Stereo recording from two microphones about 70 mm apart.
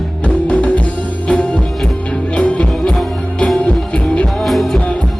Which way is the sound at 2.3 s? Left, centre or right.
Centre.